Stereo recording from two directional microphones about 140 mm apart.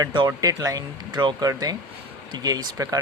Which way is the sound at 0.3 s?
25° right (ahead or behind).